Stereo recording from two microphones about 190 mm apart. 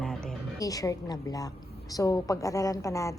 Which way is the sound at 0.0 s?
Centre (ahead or behind).